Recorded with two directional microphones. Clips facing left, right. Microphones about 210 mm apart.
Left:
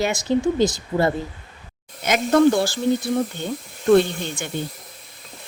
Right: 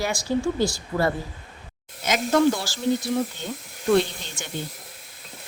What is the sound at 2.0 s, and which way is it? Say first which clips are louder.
Speech: left 4 dB; 55° left (ahead or behind).